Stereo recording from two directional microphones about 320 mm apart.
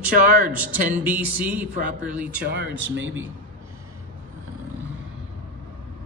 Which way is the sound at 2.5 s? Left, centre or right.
Right.